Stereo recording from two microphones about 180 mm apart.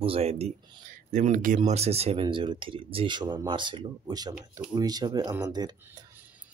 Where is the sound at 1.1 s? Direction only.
45° right (ahead or behind).